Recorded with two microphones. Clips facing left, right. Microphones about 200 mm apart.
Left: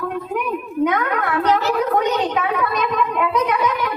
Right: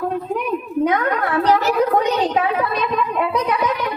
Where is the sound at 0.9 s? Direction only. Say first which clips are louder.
Right 3 dB; 30° right (ahead or behind).